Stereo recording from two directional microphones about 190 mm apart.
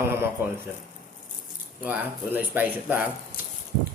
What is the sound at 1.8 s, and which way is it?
A man's voice, 10° right (ahead or behind).